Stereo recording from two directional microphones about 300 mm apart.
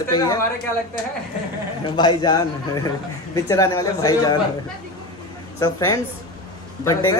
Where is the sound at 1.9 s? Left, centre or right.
Centre.